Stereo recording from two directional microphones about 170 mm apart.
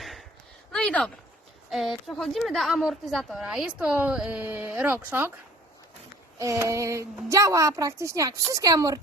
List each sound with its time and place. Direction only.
0.0 s a sound: centre (ahead or behind)
1.7 s a woman's voice: centre (ahead or behind)
6.4 s a woman's voice: 20° right (ahead or behind)